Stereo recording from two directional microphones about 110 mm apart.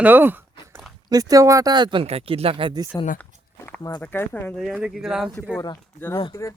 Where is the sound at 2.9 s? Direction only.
25° left (ahead or behind).